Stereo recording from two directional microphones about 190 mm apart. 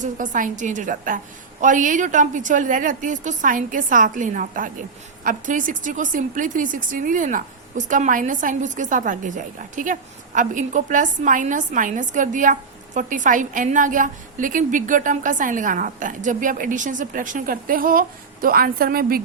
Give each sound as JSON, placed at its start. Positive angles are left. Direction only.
{"t": 0.0, "sound": "speech", "side_deg": -45}